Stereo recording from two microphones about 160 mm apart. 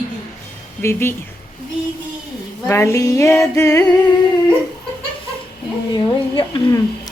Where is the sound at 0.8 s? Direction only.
15° left (ahead or behind).